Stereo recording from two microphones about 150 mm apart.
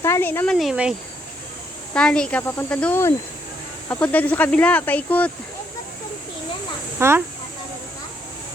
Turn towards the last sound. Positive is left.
turn(degrees=-15)  # may be behind; listen again after turning